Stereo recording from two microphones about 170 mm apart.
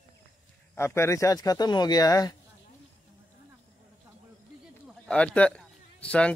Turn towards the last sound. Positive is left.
turn(degrees=5)  # may be behind; listen again after turning